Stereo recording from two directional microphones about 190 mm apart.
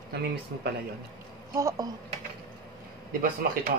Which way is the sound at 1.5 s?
15° right (ahead or behind).